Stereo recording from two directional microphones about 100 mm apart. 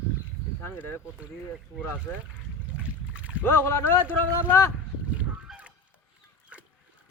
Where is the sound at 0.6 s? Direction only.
20° left (ahead or behind).